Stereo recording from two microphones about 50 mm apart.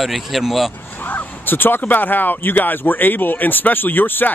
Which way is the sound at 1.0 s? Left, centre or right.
Left.